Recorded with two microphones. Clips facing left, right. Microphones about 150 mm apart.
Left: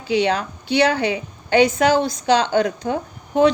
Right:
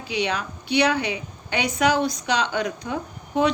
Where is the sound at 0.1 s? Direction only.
30° left (ahead or behind).